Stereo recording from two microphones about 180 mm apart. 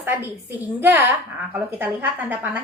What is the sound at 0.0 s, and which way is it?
A woman's voice, 10° right (ahead or behind).